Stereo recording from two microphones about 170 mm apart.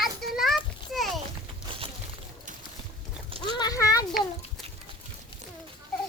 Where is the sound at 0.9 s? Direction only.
Centre (ahead or behind).